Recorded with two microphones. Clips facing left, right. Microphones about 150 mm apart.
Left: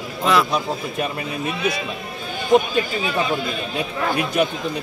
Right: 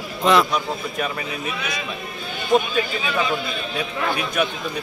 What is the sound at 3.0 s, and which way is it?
A man's voice, 40° left (ahead or behind).